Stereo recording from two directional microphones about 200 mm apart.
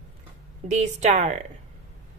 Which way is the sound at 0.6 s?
35° right (ahead or behind).